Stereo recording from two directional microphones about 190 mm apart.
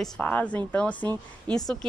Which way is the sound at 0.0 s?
10° left (ahead or behind).